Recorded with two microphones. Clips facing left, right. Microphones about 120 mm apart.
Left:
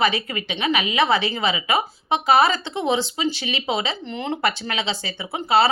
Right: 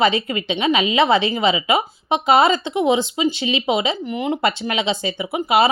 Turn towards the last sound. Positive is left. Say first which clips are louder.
# right 2 dB
turn(degrees=-15)  # may be behind; listen again after turning